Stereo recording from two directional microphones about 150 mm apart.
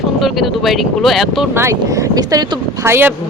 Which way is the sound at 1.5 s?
20° right (ahead or behind).